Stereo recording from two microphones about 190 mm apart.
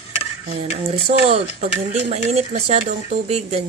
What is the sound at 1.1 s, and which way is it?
Speech, 35° right (ahead or behind).